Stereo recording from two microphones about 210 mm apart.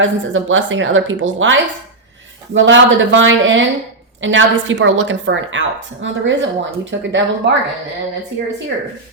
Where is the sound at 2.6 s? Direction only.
60° right (ahead or behind).